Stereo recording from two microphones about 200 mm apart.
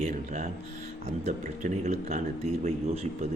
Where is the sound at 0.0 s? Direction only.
40° right (ahead or behind).